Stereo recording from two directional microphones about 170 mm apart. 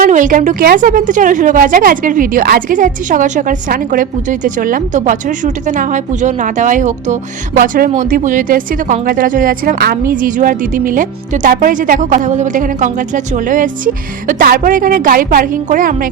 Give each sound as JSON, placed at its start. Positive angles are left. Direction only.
{"t": 0.0, "sound": "a woman's voice", "side_deg": -50}